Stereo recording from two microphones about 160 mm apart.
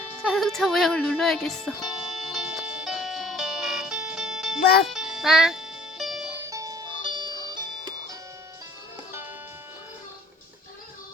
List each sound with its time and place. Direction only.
0.2 s music: centre (ahead or behind)
6.5 s music: 20° right (ahead or behind)